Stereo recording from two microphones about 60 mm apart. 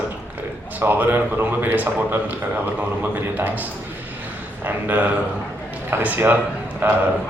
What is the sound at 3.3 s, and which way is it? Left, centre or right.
Speech, right.